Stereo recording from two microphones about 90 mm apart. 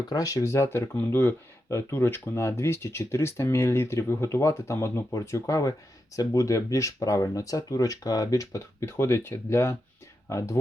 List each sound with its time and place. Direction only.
0.0 s speech: 45° left (ahead or behind)